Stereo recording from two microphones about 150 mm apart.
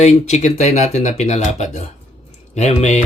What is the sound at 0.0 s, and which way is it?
Speech, 50° left (ahead or behind).